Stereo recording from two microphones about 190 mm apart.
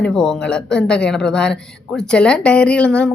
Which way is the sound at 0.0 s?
5° left (ahead or behind).